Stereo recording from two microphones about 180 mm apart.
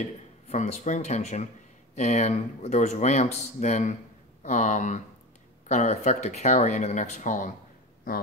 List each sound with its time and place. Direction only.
0.5 s speech: 40° left (ahead or behind)